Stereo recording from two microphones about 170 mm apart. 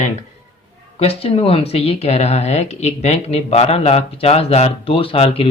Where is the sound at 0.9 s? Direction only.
35° left (ahead or behind).